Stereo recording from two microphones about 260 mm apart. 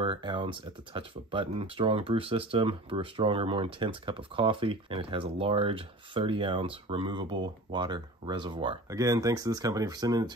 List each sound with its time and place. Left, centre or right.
0.0 s speech: centre